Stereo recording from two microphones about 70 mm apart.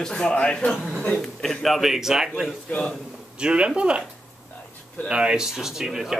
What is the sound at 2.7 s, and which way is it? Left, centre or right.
Speech, centre.